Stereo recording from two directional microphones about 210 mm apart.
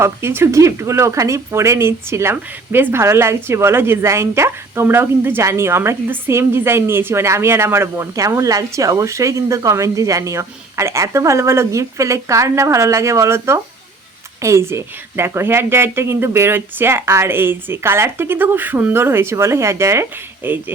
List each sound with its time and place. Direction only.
0.0 s speech: 10° right (ahead or behind)